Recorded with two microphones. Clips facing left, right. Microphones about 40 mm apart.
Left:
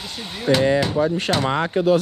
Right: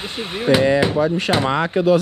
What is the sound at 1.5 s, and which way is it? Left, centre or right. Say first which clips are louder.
Speech: right 1 dB; right.